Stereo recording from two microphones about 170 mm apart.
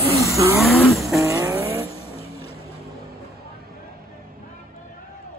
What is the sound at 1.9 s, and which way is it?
Vehicle, 35° left (ahead or behind).